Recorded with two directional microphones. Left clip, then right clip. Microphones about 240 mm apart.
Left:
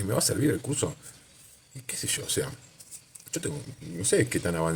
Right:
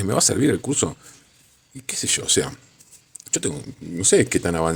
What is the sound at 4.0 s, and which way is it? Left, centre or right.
Speech, right.